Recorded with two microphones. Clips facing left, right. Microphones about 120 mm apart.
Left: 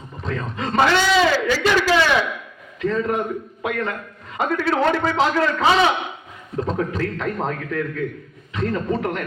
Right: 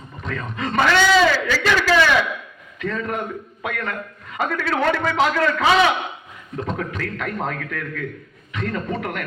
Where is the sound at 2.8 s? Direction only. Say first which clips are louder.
Left 4 dB; 25° left (ahead or behind).